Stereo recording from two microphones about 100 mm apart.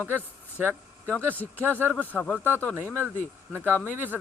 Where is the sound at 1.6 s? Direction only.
20° right (ahead or behind).